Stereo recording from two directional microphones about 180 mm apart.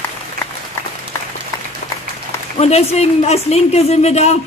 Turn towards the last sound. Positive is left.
turn(degrees=35)  # may be behind; listen again after turning